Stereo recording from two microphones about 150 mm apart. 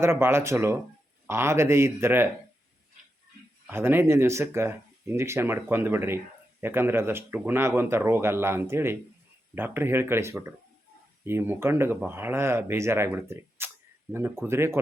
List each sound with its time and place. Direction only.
0.0 s speech: 15° right (ahead or behind)
3.7 s speech: 15° right (ahead or behind)